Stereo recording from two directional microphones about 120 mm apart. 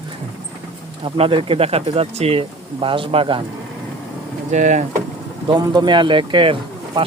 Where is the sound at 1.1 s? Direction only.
50° right (ahead or behind).